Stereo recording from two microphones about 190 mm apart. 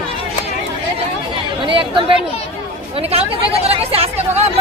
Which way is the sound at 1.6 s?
25° right (ahead or behind).